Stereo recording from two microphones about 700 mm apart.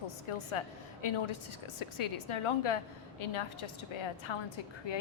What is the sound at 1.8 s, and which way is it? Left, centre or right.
A woman's voice, left.